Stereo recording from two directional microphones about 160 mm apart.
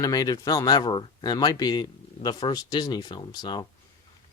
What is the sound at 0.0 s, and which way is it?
Speech, 25° left (ahead or behind).